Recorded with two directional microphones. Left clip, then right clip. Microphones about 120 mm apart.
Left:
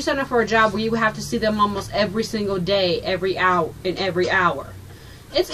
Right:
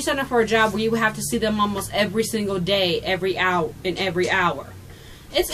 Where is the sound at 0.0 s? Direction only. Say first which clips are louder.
Even; 15° right (ahead or behind).